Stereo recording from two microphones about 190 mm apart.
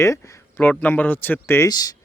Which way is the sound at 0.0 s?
15° left (ahead or behind).